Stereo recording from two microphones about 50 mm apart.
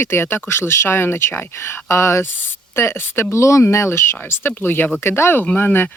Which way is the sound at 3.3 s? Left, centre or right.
Left.